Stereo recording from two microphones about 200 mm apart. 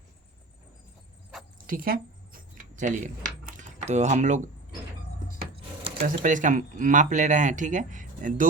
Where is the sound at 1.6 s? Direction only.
45° right (ahead or behind).